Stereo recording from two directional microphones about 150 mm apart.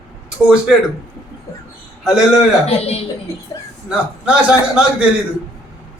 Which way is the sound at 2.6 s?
40° left (ahead or behind).